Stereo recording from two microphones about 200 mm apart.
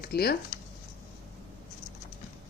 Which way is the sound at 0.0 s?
50° left (ahead or behind).